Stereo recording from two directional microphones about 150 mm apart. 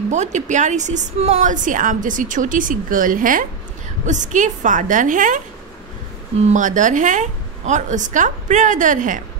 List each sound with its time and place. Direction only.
0.1 s a woman's voice: 50° right (ahead or behind)